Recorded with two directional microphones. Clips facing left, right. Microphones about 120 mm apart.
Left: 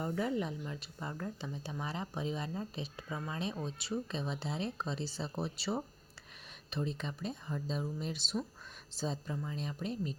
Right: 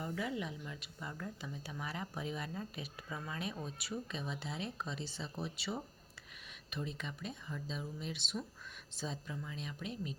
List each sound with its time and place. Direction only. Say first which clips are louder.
0.1 s speech: left 5 dB; 35° left (ahead or behind)